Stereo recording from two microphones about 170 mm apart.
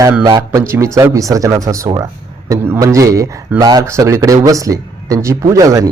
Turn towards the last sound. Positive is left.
turn(degrees=-20)  # may be behind; listen again after turning